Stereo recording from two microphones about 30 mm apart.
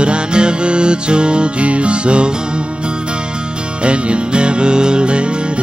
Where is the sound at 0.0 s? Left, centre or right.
Right.